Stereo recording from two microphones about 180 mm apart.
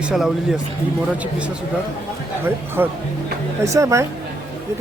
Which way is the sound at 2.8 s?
10° right (ahead or behind).